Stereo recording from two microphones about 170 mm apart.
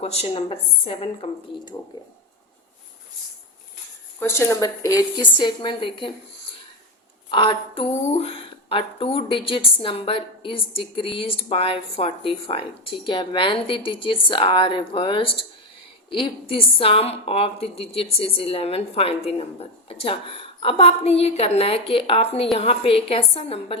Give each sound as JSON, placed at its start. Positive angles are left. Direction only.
{"t": 0.0, "sound": "speech", "side_deg": 35}
{"t": 4.2, "sound": "a woman's voice", "side_deg": 15}
{"t": 7.3, "sound": "speech", "side_deg": 30}